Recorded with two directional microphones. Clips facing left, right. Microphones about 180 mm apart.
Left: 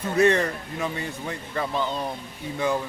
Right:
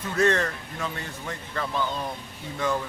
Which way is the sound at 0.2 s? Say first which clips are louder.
Left 3 dB; 15° left (ahead or behind).